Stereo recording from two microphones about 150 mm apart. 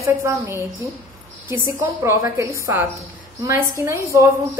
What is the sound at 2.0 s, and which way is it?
A woman's voice, 20° right (ahead or behind).